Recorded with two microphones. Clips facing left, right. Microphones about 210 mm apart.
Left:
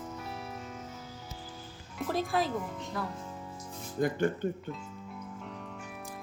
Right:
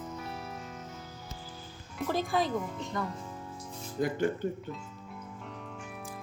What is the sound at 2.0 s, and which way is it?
Speech, centre (ahead or behind).